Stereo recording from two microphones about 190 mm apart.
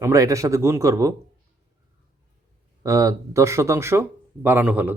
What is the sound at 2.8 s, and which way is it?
Speech, 15° right (ahead or behind).